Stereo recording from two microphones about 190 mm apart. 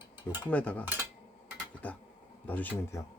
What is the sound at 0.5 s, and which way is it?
Speech, 5° left (ahead or behind).